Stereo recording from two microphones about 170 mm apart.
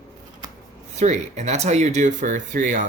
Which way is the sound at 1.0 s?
45° right (ahead or behind).